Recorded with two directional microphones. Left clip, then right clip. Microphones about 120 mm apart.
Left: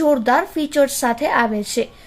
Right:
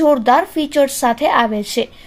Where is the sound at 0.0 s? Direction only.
10° right (ahead or behind).